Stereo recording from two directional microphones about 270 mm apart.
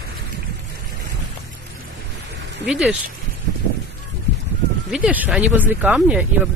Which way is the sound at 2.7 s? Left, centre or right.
Centre.